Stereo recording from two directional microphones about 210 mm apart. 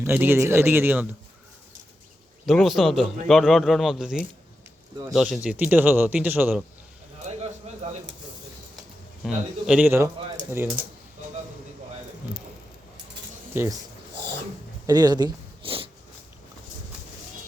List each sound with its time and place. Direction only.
0.0 s a man's voice: 10° right (ahead or behind)
2.5 s a man's voice: centre (ahead or behind)
9.2 s a man's voice: 5° right (ahead or behind)
13.5 s speech: 10° right (ahead or behind)
14.8 s a sound: 20° right (ahead or behind)